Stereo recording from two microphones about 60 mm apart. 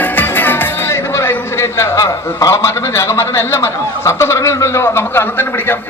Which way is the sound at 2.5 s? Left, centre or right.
Left.